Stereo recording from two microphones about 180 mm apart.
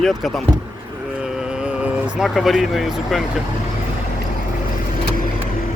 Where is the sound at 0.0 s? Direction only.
Centre (ahead or behind).